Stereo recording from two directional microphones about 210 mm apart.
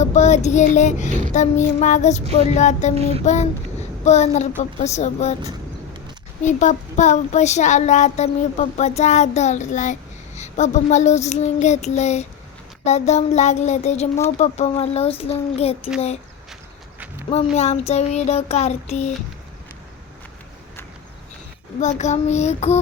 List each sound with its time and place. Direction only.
0.0 s child singing: 35° left (ahead or behind)
1.3 s speech: 35° left (ahead or behind)
2.9 s child singing: 30° right (ahead or behind)
4.0 s speech: 35° left (ahead or behind)
6.4 s speech: 35° left (ahead or behind)
17.2 s speech: 30° left (ahead or behind)
21.8 s speech: 35° left (ahead or behind)